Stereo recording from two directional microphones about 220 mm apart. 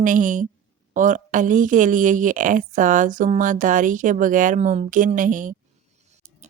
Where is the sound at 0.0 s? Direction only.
35° right (ahead or behind).